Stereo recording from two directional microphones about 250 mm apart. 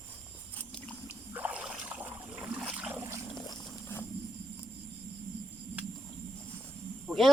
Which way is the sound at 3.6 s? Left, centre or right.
Centre.